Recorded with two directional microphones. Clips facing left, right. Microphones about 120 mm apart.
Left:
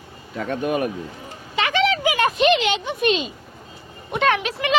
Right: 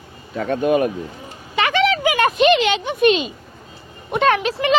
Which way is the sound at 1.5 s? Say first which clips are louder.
Right 3 dB; 60° right (ahead or behind).